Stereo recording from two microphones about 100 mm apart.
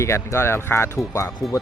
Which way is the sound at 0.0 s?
30° left (ahead or behind).